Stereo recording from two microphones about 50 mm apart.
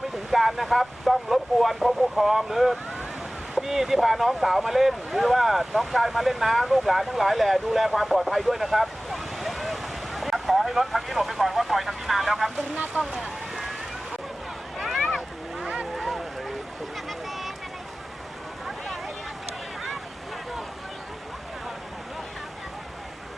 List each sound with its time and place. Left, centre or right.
0.3 s speech: centre
13.1 s boat: centre
14.8 s boat: centre
15.6 s boat: right
16.0 s a sound: centre
18.6 s a sound: centre